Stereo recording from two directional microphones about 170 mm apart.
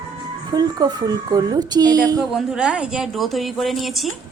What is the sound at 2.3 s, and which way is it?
Speech, 5° right (ahead or behind).